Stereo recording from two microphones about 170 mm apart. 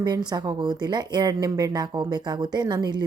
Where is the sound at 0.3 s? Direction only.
25° right (ahead or behind).